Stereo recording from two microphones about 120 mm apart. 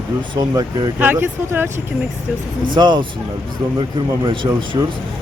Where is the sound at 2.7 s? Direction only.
40° right (ahead or behind).